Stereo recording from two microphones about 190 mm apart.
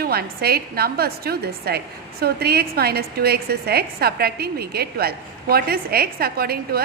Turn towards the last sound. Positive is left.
turn(degrees=-55)  # may be behind; listen again after turning